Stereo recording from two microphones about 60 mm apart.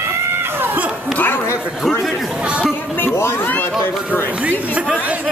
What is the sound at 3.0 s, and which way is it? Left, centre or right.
Speech, left.